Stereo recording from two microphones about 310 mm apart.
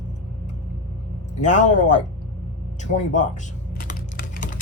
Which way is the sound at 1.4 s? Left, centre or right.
Left.